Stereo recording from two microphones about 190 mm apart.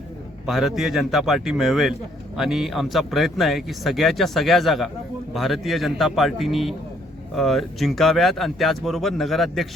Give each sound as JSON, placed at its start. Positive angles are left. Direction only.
{"t": 0.4, "sound": "a man's voice", "side_deg": 0}